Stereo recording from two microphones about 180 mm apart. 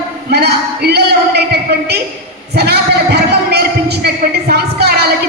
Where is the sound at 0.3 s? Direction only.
65° right (ahead or behind).